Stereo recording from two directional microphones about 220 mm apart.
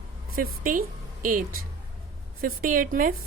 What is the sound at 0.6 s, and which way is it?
A woman's voice, 40° right (ahead or behind).